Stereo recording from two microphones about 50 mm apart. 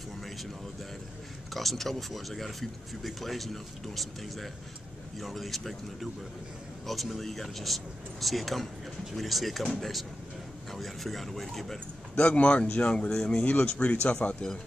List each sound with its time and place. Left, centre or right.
1.5 s speech: centre
12.2 s speech: left
13.5 s speech: left